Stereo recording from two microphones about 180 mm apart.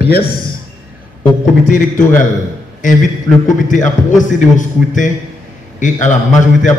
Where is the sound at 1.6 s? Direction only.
45° left (ahead or behind).